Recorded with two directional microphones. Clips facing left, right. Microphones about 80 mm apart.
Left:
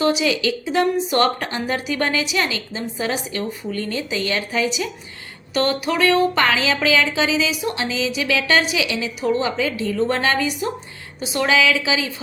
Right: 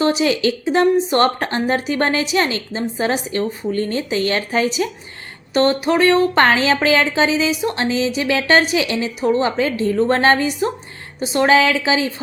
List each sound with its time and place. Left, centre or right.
0.0 s speech: right